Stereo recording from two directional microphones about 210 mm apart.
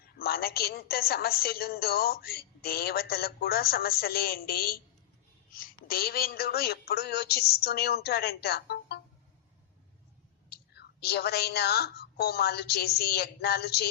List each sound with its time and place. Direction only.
0.2 s a woman's voice: 45° left (ahead or behind)
10.5 s a woman's voice: 50° left (ahead or behind)